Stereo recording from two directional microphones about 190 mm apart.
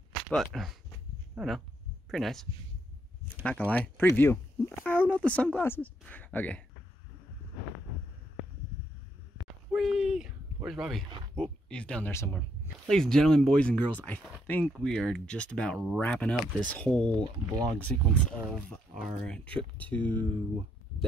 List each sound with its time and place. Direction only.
0.1 s speech: centre (ahead or behind)
3.4 s speech: 5° left (ahead or behind)
9.7 s speech: 5° right (ahead or behind)
17.2 s speech: 20° right (ahead or behind)
17.7 s speech: 5° left (ahead or behind)